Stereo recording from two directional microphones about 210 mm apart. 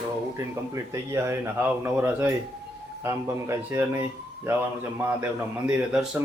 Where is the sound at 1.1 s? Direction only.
10° right (ahead or behind).